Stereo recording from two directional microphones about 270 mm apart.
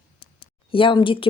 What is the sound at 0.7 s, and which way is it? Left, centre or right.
Speech, centre.